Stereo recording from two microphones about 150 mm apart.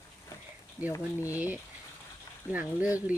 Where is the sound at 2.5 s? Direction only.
10° right (ahead or behind).